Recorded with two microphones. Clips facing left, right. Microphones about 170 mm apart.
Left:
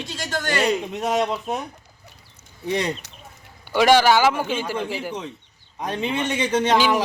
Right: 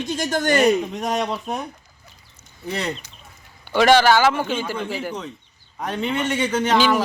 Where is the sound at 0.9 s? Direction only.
5° left (ahead or behind).